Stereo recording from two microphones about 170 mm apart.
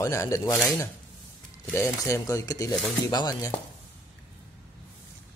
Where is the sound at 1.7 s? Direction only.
15° left (ahead or behind).